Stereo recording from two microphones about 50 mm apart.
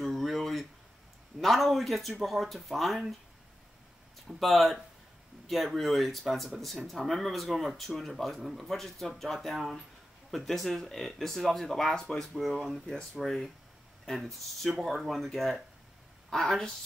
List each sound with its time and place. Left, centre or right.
0.0 s a sound: centre
1.4 s speech: centre
4.4 s speech: centre
14.6 s a woman's voice: centre